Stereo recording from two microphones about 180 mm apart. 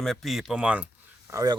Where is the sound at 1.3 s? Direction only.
20° right (ahead or behind).